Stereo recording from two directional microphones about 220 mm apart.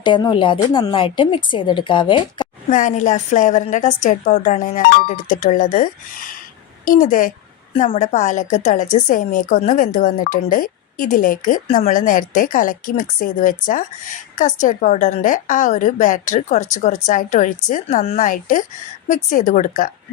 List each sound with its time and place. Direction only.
0.0 s a woman's voice: 20° left (ahead or behind)
2.6 s a woman's voice: 35° left (ahead or behind)